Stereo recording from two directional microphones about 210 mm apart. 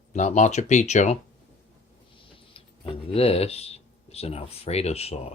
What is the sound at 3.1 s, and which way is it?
Speech, 30° left (ahead or behind).